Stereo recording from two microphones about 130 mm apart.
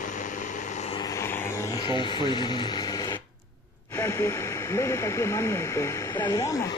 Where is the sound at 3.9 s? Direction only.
25° left (ahead or behind).